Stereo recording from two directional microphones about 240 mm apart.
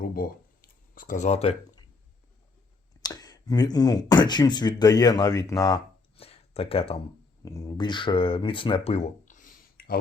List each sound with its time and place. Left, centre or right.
0.1 s a sound: left
3.0 s speech: centre
7.4 s speech: centre; by 10.0 s left